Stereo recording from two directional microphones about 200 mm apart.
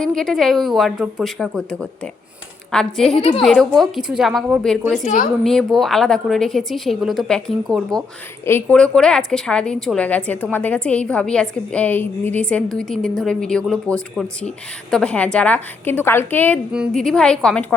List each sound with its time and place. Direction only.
0.0 s a woman's voice: centre (ahead or behind)
5.0 s a woman's voice: 40° left (ahead or behind)
5.4 s a woman's voice: centre (ahead or behind)
14.8 s a woman's voice: 5° left (ahead or behind)
16.7 s a woman's voice: centre (ahead or behind)